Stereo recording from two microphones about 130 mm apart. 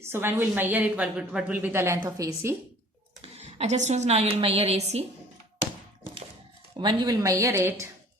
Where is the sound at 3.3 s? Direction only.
55° right (ahead or behind).